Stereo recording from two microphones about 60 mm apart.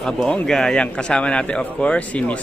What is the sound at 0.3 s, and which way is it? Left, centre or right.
A man's voice, centre.